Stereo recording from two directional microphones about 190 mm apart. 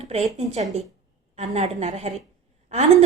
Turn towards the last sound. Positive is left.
turn(degrees=-35)  # may be behind; listen again after turning